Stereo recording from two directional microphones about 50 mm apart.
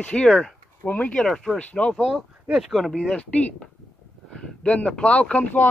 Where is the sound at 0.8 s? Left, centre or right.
Left.